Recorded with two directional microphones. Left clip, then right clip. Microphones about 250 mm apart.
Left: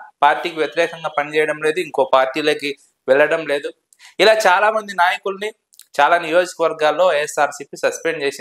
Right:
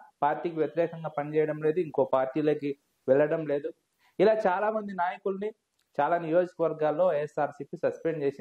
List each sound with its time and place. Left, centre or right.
0.0 s speech: centre